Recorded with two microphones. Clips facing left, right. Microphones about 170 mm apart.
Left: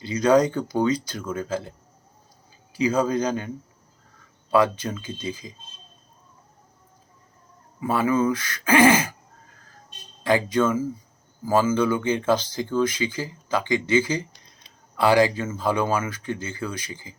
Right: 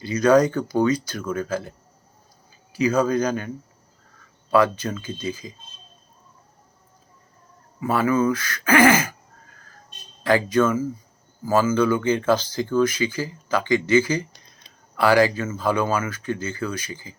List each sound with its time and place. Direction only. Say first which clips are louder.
0.0 s speech: right 2 dB; 20° left (ahead or behind)
2.7 s speech: right 2 dB; 20° left (ahead or behind)
4.5 s speech: right 1 dB; 20° left (ahead or behind)
7.9 s speech: right 1 dB; 15° left (ahead or behind)
10.2 s speech: right 2 dB; 20° left (ahead or behind)